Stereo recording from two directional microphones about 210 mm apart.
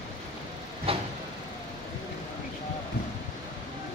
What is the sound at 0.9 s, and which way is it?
Vehicle, 25° right (ahead or behind).